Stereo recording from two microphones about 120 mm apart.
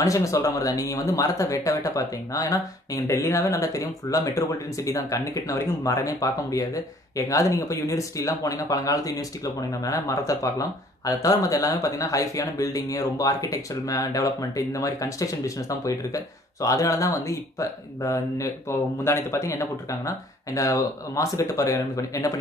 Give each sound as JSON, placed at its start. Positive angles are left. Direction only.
{"t": 0.0, "sound": "speech", "side_deg": 25}